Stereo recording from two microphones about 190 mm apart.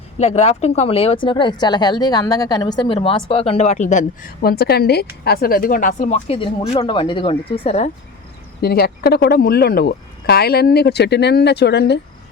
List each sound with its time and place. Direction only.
0.2 s speech: 35° left (ahead or behind)
8.6 s speech: 55° left (ahead or behind)